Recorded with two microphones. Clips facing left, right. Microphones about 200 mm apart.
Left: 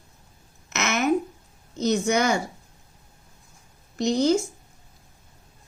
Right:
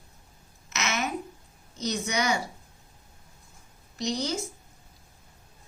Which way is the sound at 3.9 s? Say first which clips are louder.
Left 9 dB; 50° left (ahead or behind).